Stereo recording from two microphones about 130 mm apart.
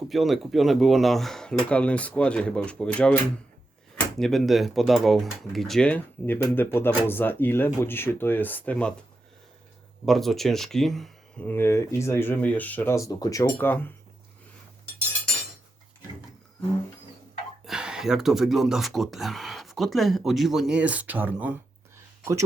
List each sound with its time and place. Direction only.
0.1 s speech: centre (ahead or behind)
4.2 s speech: centre (ahead or behind)
10.1 s speech: centre (ahead or behind)
11.4 s speech: 15° left (ahead or behind)
17.7 s speech: 5° right (ahead or behind)
22.2 s speech: 25° right (ahead or behind)